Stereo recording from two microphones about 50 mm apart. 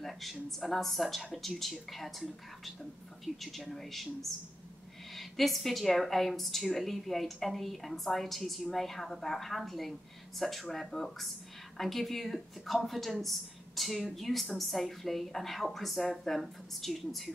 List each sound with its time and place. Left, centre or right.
0.0 s a woman's voice: centre